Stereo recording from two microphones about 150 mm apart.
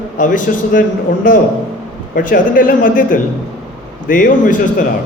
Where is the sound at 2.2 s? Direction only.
65° left (ahead or behind).